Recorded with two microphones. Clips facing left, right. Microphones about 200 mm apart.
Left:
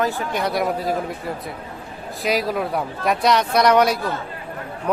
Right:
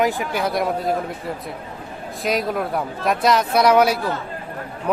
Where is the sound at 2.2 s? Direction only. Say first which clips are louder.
Even; centre (ahead or behind).